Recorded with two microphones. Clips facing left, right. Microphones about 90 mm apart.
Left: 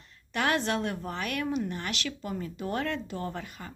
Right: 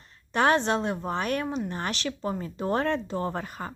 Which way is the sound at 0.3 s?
30° right (ahead or behind).